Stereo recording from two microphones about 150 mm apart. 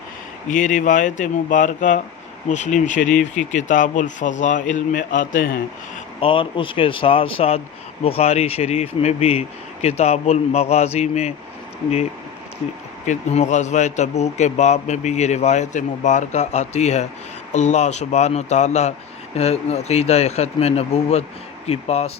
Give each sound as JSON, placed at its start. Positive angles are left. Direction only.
{"t": 0.5, "sound": "a man's voice", "side_deg": 60}
{"t": 6.1, "sound": "speech", "side_deg": 35}
{"t": 13.1, "sound": "speech", "side_deg": 50}